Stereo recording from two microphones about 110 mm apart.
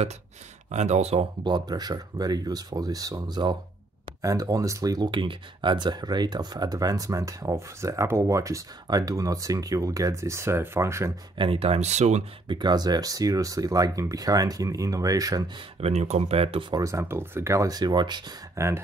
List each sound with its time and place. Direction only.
0.7 s speech: 90° right
1.4 s speech: 40° right (ahead or behind)
11.3 s speech: 55° right (ahead or behind); by 12.3 s 90° right
12.4 s speech: 40° right (ahead or behind)
15.8 s speech: 80° right; by 16.6 s 60° right (ahead or behind)
16.7 s speech: 30° right (ahead or behind)
18.6 s speech: 25° right (ahead or behind)